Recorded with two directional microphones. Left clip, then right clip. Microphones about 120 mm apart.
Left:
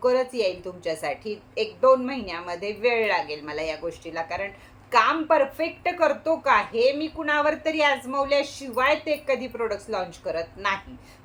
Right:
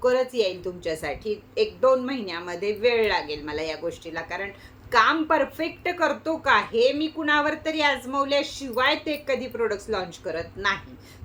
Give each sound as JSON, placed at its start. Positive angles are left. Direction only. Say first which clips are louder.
{"t": 0.0, "sound": "a woman's voice", "louder": "even", "side_deg": -20}